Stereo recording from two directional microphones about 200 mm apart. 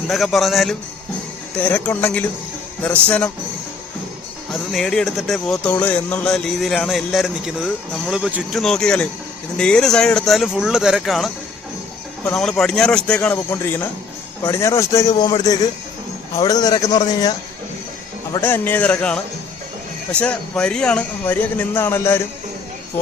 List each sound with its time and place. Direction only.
0.1 s speech: centre (ahead or behind)
4.7 s speech: centre (ahead or behind); by 17.3 s 20° left (ahead or behind)
18.3 s speech: 10° left (ahead or behind)